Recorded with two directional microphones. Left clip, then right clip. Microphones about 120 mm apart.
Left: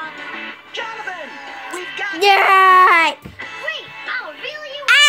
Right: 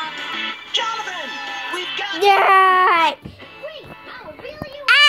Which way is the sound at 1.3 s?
10° right (ahead or behind).